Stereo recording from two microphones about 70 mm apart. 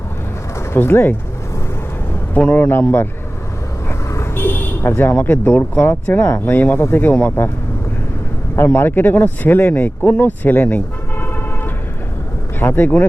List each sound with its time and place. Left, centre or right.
0.7 s speech: left
2.3 s speech: left
3.8 s vehicle: left
5.8 s speech: left
8.5 s speech: left